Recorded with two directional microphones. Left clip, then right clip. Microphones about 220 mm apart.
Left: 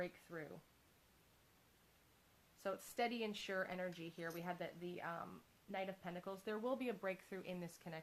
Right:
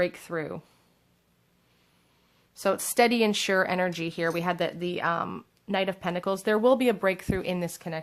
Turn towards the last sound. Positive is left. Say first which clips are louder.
# right 19 dB
turn(degrees=-25)  # may be behind; listen again after turning